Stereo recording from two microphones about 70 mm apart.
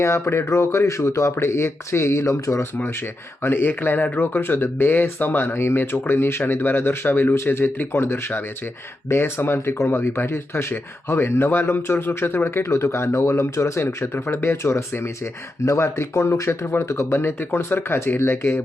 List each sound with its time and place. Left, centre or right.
0.0 s speech: left
3.4 s speech: left